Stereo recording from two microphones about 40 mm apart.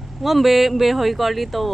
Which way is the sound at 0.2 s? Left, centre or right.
Centre.